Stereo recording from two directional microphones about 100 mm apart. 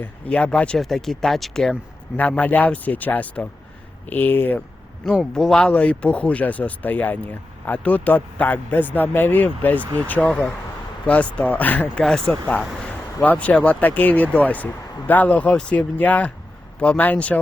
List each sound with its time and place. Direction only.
0.0 s speech: 15° left (ahead or behind)
2.4 s speech: 15° left (ahead or behind)
5.3 s speech: 5° left (ahead or behind)